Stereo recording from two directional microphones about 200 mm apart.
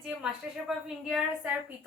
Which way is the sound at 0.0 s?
Centre (ahead or behind).